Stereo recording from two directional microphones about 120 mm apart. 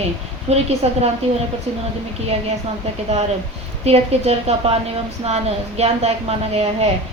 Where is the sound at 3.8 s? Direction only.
60° right (ahead or behind).